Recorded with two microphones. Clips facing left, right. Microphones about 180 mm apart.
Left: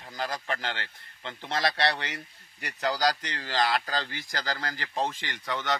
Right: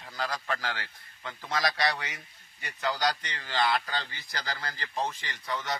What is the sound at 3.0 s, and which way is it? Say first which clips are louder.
Speech: left 3 dB; 90° left.